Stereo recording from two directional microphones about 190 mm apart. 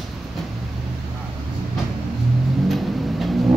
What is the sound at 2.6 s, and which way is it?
Music, centre (ahead or behind).